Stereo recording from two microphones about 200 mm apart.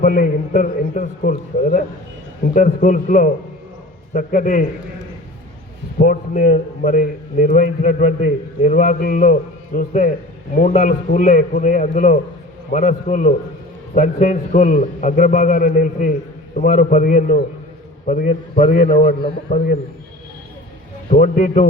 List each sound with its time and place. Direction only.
0.0 s a man's voice: 45° left (ahead or behind)
6.0 s a man's voice: 45° left (ahead or behind)
21.1 s a man's voice: 40° left (ahead or behind)